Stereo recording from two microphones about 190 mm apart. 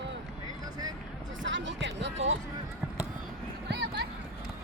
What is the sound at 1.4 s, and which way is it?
Basketball bounce, 75° right (ahead or behind).